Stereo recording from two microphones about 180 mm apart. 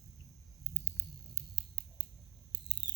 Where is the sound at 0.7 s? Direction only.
15° right (ahead or behind).